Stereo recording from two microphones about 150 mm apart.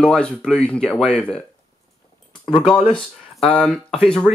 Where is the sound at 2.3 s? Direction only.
30° left (ahead or behind).